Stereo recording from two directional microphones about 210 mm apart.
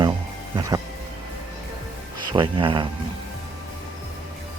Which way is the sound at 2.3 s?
25° right (ahead or behind).